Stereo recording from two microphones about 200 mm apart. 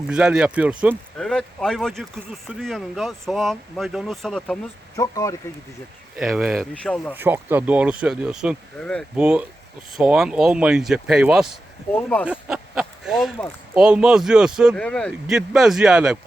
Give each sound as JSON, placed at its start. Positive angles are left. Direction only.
{"t": 0.1, "sound": "speech", "side_deg": -5}
{"t": 4.9, "sound": "speech", "side_deg": 15}
{"t": 6.1, "sound": "speech", "side_deg": -5}
{"t": 7.1, "sound": "speech", "side_deg": -10}
{"t": 11.9, "sound": "speech", "side_deg": 10}
{"t": 12.3, "sound": "speech", "side_deg": -5}